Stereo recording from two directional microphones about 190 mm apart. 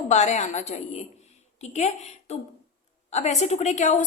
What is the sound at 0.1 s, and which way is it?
A woman's voice, 40° left (ahead or behind).